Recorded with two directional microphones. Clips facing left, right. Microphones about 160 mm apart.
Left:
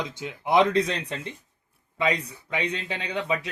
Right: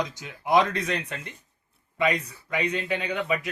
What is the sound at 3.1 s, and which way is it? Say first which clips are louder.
Speech: left 2 dB; 30° left (ahead or behind).